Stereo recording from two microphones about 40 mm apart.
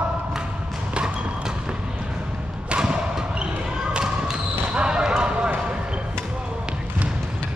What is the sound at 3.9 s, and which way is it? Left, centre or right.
Basketball bounce, centre.